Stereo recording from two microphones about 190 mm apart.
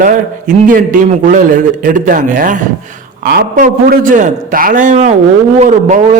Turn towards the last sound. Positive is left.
turn(degrees=-40)  # may be behind; listen again after turning